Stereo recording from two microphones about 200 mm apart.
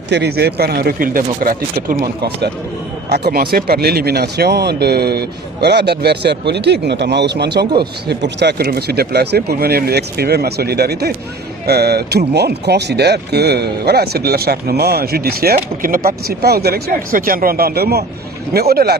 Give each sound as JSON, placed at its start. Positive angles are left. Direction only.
{"t": 0.1, "sound": "speech", "side_deg": -55}